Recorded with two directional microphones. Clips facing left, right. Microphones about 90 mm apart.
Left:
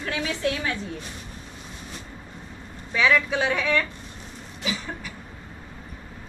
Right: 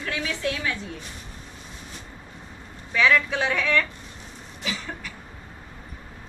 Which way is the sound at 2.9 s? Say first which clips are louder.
Even; 10° left (ahead or behind).